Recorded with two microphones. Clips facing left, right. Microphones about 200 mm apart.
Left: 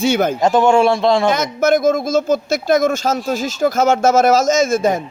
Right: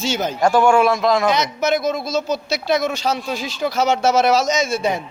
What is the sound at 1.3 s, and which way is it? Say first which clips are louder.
Speech: left 4 dB; 50° left (ahead or behind).